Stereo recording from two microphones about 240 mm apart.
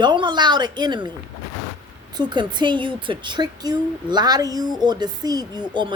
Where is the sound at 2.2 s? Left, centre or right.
Centre.